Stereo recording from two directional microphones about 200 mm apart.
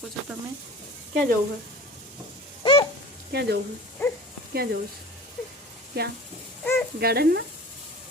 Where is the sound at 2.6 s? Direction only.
25° left (ahead or behind).